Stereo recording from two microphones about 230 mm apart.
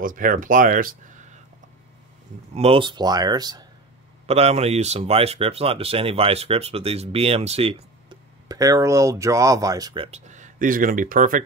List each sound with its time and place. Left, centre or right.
0.0 s speech: right
2.5 s speech: right
4.3 s speech: right
10.1 s speech: right